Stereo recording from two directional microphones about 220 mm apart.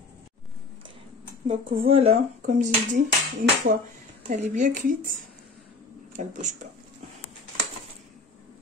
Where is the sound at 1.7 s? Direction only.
25° right (ahead or behind).